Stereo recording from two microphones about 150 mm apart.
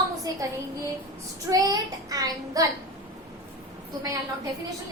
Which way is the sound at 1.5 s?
25° right (ahead or behind).